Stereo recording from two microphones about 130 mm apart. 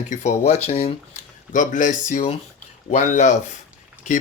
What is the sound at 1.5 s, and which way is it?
Speech, 75° left (ahead or behind).